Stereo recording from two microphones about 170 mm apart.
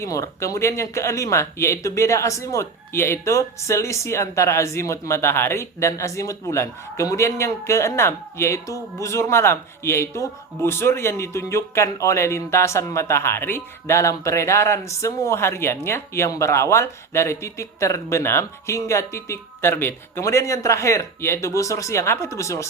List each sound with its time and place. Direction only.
0.0 s speech: 15° left (ahead or behind)